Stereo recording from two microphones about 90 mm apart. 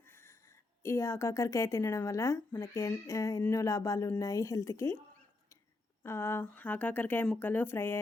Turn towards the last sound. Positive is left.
turn(degrees=25)  # may be behind; listen again after turning